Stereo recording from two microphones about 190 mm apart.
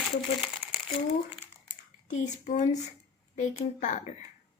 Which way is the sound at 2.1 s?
40° left (ahead or behind).